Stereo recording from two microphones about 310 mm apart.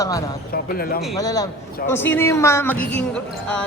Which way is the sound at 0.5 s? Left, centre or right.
Left.